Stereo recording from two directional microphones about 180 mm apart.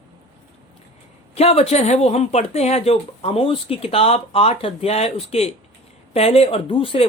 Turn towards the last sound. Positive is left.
turn(degrees=30)  # may be behind; listen again after turning